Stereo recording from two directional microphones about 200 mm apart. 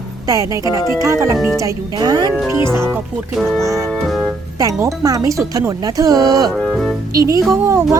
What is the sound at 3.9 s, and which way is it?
Music, centre (ahead or behind).